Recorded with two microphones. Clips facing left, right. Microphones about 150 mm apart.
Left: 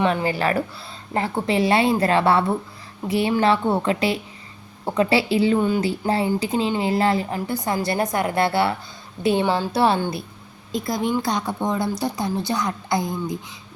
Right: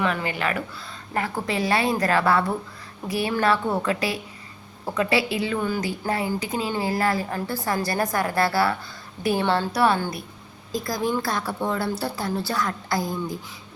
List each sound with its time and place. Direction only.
0.0 s a woman's voice: 30° left (ahead or behind)